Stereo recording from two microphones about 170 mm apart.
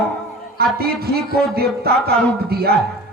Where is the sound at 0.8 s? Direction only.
65° right (ahead or behind).